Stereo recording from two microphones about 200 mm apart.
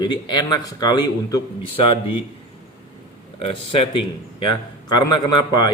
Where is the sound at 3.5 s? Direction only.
25° left (ahead or behind).